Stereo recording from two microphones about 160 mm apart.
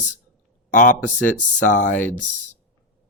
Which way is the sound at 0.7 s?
55° left (ahead or behind).